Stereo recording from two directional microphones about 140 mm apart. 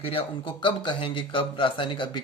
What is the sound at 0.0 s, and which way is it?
A man's voice, 40° left (ahead or behind).